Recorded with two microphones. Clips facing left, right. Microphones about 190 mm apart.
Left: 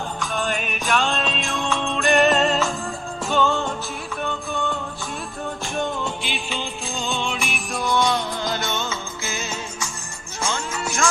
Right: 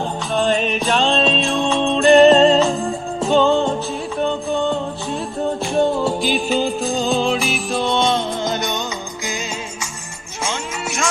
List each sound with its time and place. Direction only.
0.3 s music: 25° right (ahead or behind)
1.5 s music: 20° right (ahead or behind)
2.0 s music: 30° right (ahead or behind)
3.2 s music: 20° right (ahead or behind)
5.4 s music: 30° right (ahead or behind)
10.4 s music: 10° right (ahead or behind)